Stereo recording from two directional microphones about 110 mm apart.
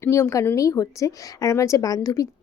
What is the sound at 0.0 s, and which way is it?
A woman's voice, 25° left (ahead or behind).